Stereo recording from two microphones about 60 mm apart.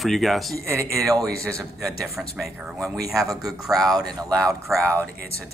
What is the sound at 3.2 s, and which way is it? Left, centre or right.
Speech, right.